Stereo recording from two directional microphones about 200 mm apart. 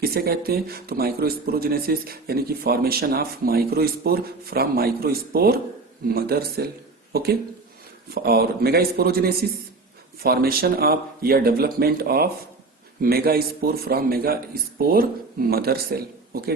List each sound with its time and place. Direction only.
0.0 s speech: 50° right (ahead or behind)